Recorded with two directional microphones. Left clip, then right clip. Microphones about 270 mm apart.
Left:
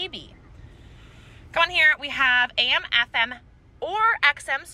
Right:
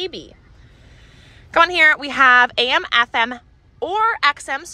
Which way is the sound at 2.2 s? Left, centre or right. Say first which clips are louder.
Right 7 dB; right.